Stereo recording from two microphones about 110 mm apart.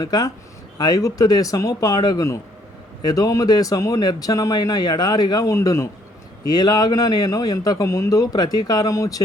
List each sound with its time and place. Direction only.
0.0 s a man's voice: 40° left (ahead or behind)